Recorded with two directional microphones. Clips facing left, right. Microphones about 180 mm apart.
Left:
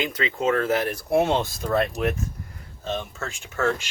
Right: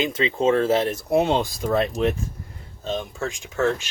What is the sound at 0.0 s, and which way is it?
Speech, 25° right (ahead or behind).